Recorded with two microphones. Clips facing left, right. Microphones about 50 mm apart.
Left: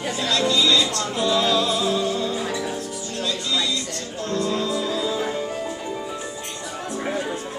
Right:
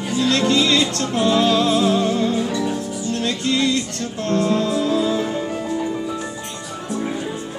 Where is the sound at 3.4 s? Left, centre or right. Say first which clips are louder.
Right 6 dB; right.